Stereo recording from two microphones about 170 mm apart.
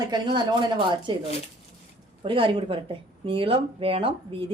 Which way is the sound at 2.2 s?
30° right (ahead or behind).